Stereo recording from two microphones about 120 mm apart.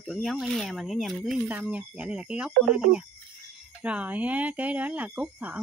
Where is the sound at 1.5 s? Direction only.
10° right (ahead or behind).